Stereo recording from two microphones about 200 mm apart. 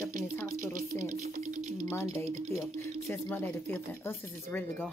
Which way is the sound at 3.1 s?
10° left (ahead or behind).